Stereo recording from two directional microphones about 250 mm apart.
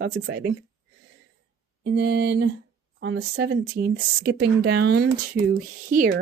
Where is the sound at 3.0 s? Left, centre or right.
Right.